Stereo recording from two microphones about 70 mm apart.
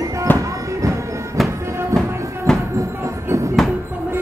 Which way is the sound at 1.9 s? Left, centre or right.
Right.